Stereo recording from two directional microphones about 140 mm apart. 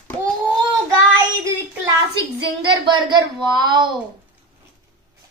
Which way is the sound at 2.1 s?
35° right (ahead or behind).